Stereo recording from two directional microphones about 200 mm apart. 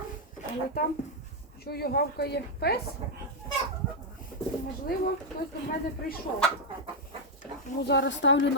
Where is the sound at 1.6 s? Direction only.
50° left (ahead or behind).